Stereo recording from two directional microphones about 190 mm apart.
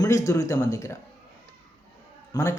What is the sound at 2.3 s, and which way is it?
Speech, 20° left (ahead or behind).